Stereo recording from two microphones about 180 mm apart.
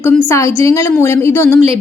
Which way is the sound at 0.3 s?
15° left (ahead or behind).